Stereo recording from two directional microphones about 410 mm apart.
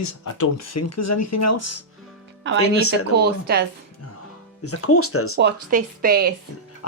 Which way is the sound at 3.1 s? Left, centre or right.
Right.